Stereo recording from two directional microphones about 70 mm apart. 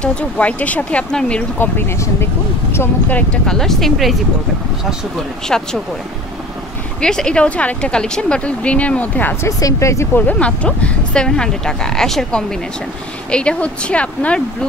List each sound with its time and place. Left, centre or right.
0.0 s speech: centre
1.6 s speech: left
3.4 s speech: centre
5.5 s speech: centre
7.0 s speech: centre
9.6 s speech: left
10.1 s speech: left